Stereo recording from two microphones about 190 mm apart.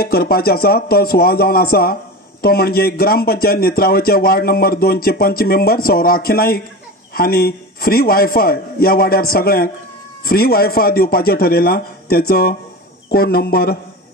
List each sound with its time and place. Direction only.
0.0 s speech: 50° left (ahead or behind)